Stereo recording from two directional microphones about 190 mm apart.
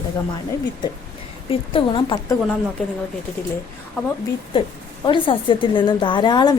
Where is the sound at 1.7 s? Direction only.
25° left (ahead or behind).